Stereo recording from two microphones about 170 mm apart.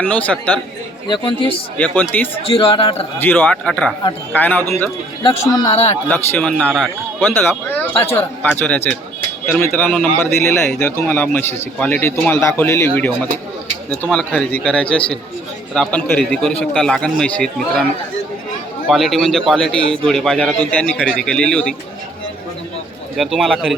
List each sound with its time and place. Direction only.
0.0 s a man's voice: 10° left (ahead or behind)
1.0 s a man's voice: 25° left (ahead or behind)
1.8 s a man's voice: 10° left (ahead or behind)
2.4 s a man's voice: 35° left (ahead or behind)
3.2 s a man's voice: 10° left (ahead or behind)
5.2 s a man's voice: 20° left (ahead or behind)
6.1 s a man's voice: 10° left (ahead or behind)
18.9 s a man's voice: centre (ahead or behind)
23.1 s a man's voice: centre (ahead or behind)